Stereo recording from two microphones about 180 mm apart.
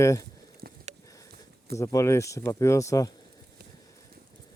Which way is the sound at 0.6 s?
60° right (ahead or behind).